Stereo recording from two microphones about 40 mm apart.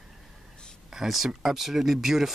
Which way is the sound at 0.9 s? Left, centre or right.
Centre.